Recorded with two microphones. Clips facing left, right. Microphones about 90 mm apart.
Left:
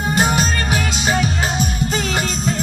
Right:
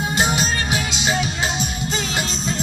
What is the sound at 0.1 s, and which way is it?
Music, 40° left (ahead or behind).